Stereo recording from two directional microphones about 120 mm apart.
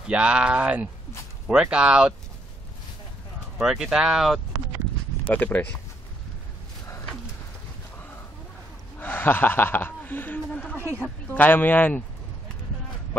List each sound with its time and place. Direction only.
0.0 s speech: 10° right (ahead or behind)
3.6 s speech: 5° right (ahead or behind)
5.3 s speech: 10° left (ahead or behind)
9.0 s speech: 15° left (ahead or behind)
10.8 s a woman's voice: 20° right (ahead or behind)
11.3 s speech: 15° left (ahead or behind)